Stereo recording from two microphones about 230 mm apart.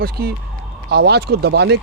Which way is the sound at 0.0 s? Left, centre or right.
Right.